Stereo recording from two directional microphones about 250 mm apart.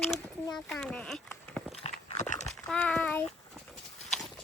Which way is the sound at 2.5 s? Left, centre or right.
Centre.